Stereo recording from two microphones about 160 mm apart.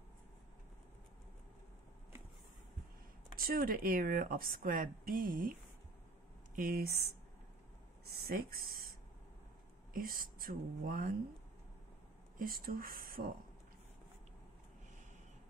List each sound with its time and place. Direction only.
3.3 s speech: 65° right (ahead or behind)
9.9 s speech: 65° right (ahead or behind)
12.4 s speech: 65° right (ahead or behind)